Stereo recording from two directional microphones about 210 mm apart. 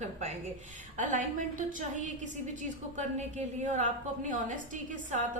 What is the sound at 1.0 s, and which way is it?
A woman's voice, 35° right (ahead or behind).